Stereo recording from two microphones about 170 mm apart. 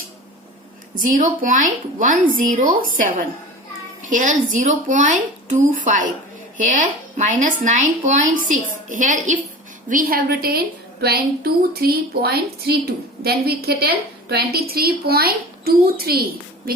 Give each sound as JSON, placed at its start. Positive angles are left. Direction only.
{"t": 0.9, "sound": "a woman's voice", "side_deg": -50}